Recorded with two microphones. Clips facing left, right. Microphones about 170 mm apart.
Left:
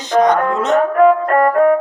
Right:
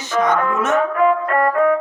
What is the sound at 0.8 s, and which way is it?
Music, 45° left (ahead or behind).